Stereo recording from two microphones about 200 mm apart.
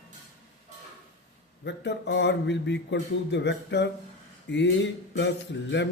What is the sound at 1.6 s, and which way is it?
A man's voice, 60° left (ahead or behind).